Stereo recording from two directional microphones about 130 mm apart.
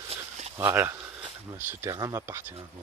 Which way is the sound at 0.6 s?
20° right (ahead or behind).